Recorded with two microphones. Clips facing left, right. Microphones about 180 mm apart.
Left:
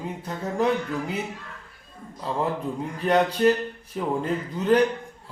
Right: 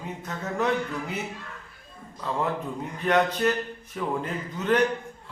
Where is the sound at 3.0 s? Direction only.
30° left (ahead or behind).